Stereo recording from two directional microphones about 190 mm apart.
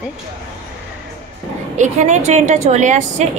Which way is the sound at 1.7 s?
40° right (ahead or behind).